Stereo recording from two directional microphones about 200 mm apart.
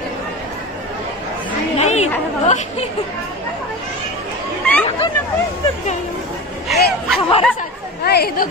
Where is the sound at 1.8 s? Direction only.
35° left (ahead or behind).